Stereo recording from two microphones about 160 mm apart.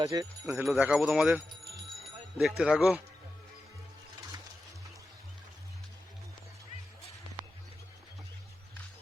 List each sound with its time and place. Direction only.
0.0 s speech: 20° right (ahead or behind)
0.6 s speech: 5° right (ahead or behind)
2.4 s speech: 5° right (ahead or behind)